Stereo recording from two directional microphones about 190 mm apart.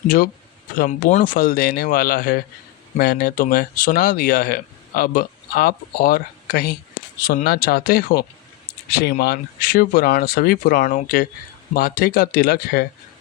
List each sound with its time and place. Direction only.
0.8 s speech: 45° left (ahead or behind)